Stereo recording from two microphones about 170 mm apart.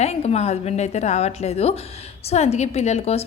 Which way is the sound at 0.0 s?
40° left (ahead or behind).